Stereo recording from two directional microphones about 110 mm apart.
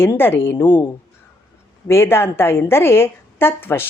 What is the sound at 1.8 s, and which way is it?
A woman's voice, 20° left (ahead or behind).